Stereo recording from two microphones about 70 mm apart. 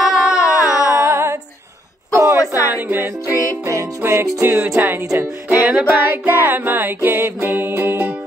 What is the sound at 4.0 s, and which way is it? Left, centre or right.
Music, right.